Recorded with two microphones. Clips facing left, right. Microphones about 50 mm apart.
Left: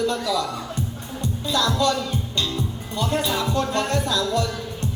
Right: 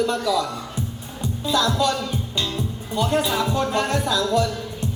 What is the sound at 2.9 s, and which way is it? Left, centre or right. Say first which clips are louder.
Speech: right 3 dB; centre.